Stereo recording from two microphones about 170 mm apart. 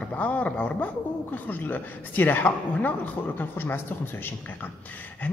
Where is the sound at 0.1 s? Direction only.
10° left (ahead or behind).